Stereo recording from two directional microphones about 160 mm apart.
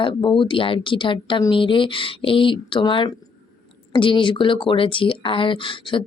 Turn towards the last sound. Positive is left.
turn(degrees=30)  # may be behind; listen again after turning